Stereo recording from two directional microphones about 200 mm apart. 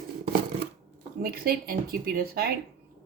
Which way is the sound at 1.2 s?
50° right (ahead or behind).